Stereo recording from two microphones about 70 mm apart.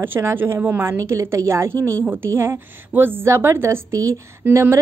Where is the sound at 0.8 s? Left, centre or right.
Right.